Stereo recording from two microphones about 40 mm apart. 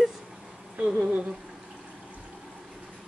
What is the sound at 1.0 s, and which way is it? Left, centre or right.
Humming, right.